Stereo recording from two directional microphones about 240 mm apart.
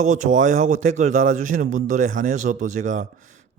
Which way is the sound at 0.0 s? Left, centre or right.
Right.